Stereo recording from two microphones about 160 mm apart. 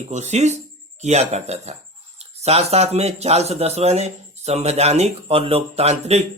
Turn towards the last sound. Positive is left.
turn(degrees=-40)  # may be behind; listen again after turning